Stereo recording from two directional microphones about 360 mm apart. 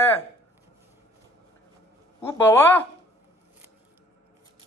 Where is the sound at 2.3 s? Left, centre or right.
Centre.